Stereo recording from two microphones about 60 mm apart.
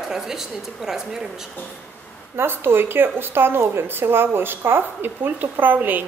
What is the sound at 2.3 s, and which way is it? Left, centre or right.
A woman's voice, right.